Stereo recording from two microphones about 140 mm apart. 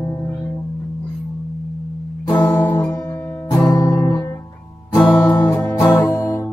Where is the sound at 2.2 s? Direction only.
15° left (ahead or behind).